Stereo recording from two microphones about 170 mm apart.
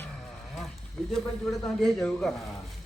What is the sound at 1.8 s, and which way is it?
Speech, centre (ahead or behind).